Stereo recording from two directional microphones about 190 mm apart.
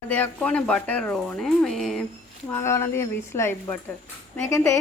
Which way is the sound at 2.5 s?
15° left (ahead or behind).